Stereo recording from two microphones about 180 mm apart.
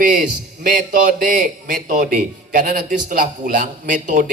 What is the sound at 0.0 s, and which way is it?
A woman's voice, 50° right (ahead or behind).